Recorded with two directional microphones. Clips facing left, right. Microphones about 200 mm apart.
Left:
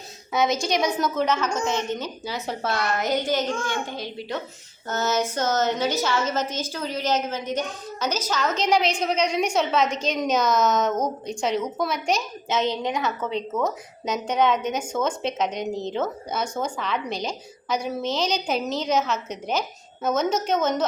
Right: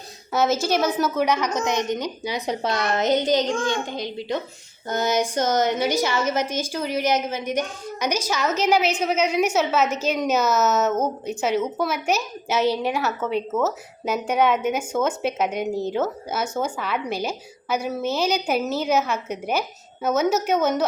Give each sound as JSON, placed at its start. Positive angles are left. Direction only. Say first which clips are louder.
{"t": 0.3, "sound": "a woman's voice", "louder": "right 2 dB", "side_deg": -5}